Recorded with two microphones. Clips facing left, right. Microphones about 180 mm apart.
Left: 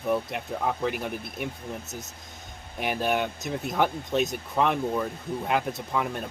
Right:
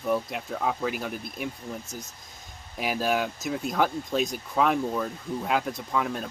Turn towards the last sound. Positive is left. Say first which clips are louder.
# even
turn(degrees=0)  # may be behind; listen again after turning